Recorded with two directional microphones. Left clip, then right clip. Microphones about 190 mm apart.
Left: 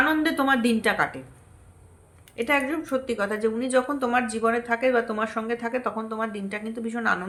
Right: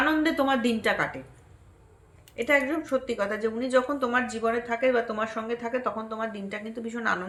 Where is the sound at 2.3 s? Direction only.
20° left (ahead or behind).